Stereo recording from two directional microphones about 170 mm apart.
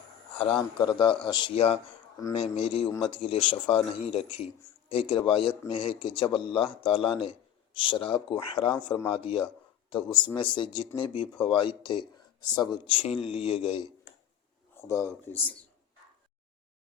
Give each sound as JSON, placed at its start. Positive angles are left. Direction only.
{"t": 0.3, "sound": "speech", "side_deg": 30}
{"t": 14.8, "sound": "speech", "side_deg": 15}